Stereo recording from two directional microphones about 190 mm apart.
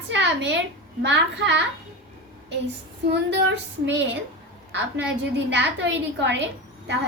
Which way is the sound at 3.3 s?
70° right (ahead or behind).